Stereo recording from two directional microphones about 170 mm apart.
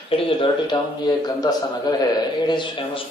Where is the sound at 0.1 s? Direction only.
30° left (ahead or behind).